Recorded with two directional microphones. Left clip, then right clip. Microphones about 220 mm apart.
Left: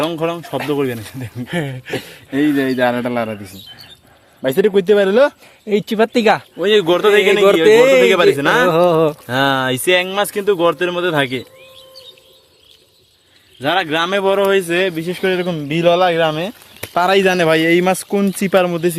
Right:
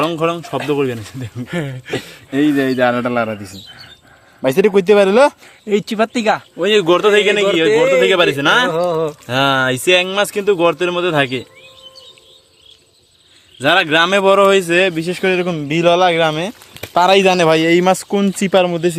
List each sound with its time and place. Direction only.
0.0 s speech: 10° right (ahead or behind)
1.5 s speech: 20° left (ahead or behind)
2.3 s speech: 5° right (ahead or behind)
5.6 s speech: 5° left (ahead or behind)
6.1 s speech: 25° left (ahead or behind)
6.6 s speech: 5° right (ahead or behind)
8.7 s speech: 40° left (ahead or behind)
9.2 s speech: centre (ahead or behind)
13.6 s speech: 20° right (ahead or behind); by 18.9 s centre (ahead or behind)